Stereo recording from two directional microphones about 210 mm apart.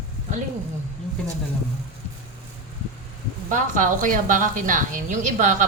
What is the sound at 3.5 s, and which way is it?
A woman's voice, 40° right (ahead or behind).